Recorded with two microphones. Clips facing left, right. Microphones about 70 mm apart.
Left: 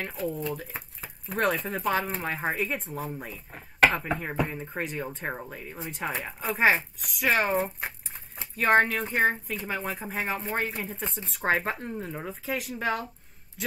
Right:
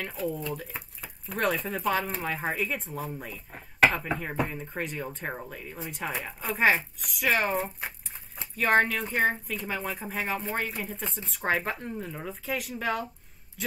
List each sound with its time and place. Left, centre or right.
0.1 s speech: centre
11.4 s speech: centre
11.7 s speech: centre
12.4 s speech: centre